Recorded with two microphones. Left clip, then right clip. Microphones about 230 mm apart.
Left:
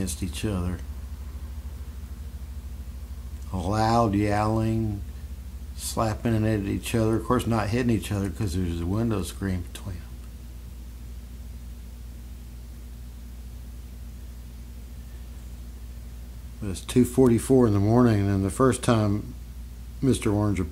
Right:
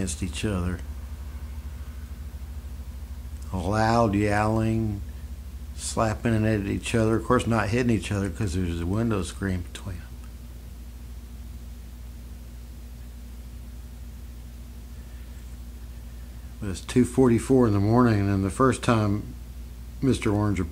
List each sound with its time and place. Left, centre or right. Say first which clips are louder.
0.0 s speech: right 1 dB; centre
3.5 s speech: even; centre
16.6 s speech: left 1 dB; centre